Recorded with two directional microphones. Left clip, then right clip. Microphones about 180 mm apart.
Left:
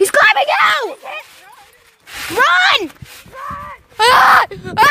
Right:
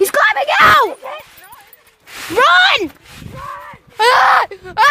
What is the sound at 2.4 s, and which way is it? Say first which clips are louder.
Speech: right 2 dB; 25° right (ahead or behind).